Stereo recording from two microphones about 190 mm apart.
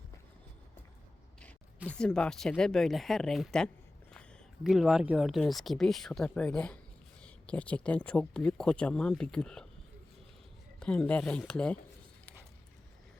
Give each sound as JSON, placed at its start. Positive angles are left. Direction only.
{"t": 1.9, "sound": "speech", "side_deg": 5}
{"t": 10.8, "sound": "speech", "side_deg": 5}